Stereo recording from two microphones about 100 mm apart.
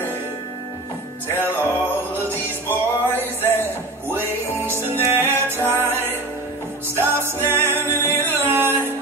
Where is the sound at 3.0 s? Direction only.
20° left (ahead or behind).